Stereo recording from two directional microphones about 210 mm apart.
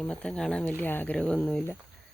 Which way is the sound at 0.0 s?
5° left (ahead or behind).